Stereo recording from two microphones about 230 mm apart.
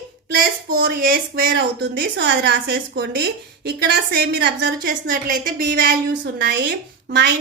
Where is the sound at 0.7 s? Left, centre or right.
Right.